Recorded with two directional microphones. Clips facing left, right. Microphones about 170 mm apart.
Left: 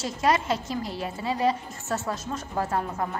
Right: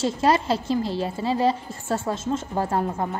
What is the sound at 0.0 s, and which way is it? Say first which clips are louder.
A woman's voice: right 4 dB; 30° right (ahead or behind).